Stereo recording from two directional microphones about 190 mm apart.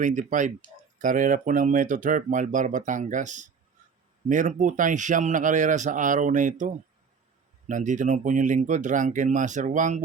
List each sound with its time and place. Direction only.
0.0 s speech: 40° right (ahead or behind)